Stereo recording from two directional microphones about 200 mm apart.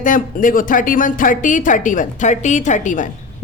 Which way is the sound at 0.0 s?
40° left (ahead or behind).